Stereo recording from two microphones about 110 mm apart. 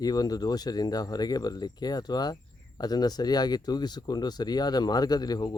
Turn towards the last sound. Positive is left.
turn(degrees=40)  # may be behind; listen again after turning